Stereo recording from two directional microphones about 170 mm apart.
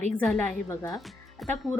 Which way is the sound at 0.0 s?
10° left (ahead or behind).